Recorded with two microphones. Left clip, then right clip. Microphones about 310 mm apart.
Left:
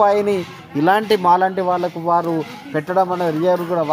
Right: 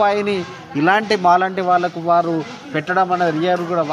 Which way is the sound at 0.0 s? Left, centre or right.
Left.